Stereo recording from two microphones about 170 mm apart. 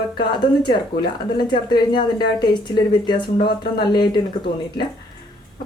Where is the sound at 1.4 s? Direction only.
30° left (ahead or behind).